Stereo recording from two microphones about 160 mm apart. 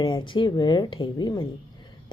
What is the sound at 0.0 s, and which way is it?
A woman's voice, 30° left (ahead or behind).